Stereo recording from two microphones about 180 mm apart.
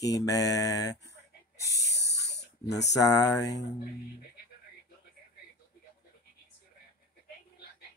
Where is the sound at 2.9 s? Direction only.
20° left (ahead or behind).